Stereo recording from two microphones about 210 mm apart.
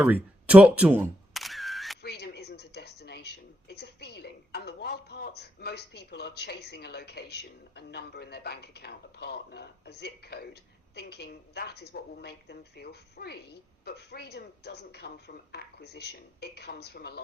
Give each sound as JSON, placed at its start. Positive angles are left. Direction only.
{"t": 0.0, "sound": "single-lens reflex camera", "side_deg": -5}
{"t": 2.0, "sound": "a sound", "side_deg": 50}
{"t": 10.9, "sound": "a woman's voice", "side_deg": 50}